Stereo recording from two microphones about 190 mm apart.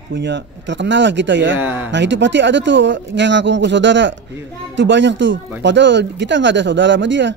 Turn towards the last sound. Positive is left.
turn(degrees=-70)  # may be behind; listen again after turning